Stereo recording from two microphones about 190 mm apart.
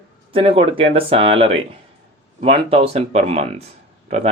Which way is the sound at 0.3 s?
30° right (ahead or behind).